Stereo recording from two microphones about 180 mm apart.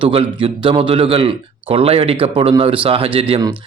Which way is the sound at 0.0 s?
30° right (ahead or behind).